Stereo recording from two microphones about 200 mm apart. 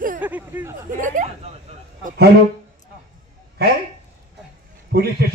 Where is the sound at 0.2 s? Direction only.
10° right (ahead or behind).